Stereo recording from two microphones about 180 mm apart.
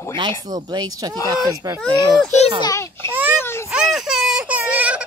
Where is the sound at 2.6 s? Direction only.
20° left (ahead or behind).